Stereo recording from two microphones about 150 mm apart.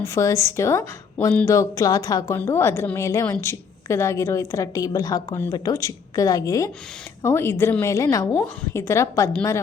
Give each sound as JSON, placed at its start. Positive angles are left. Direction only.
{"t": 0.0, "sound": "a woman's voice", "side_deg": 20}